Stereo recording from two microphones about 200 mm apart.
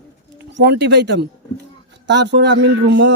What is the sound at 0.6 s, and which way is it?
Speech, 60° right (ahead or behind).